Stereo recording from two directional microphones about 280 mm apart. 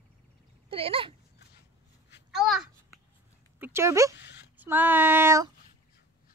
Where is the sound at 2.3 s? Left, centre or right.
Centre.